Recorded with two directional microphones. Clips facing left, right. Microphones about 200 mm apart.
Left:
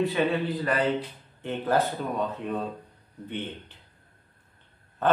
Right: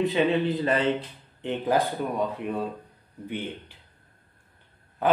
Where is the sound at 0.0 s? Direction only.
20° right (ahead or behind).